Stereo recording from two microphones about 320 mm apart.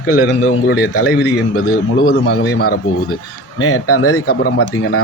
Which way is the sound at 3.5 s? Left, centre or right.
Left.